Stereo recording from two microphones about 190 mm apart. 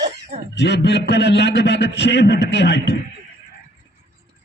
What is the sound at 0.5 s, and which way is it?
A man's voice, 65° left (ahead or behind).